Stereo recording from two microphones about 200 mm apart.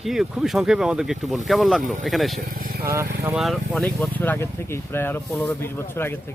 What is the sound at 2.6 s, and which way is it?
Vehicle, 45° right (ahead or behind).